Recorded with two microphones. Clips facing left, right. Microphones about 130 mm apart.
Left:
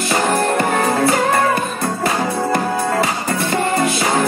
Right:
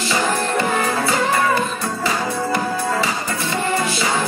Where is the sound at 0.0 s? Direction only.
50° left (ahead or behind).